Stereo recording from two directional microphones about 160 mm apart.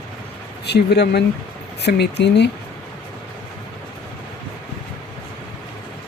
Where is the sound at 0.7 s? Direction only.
90° left.